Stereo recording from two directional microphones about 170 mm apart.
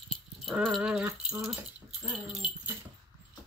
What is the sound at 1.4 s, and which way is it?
Speech, centre (ahead or behind).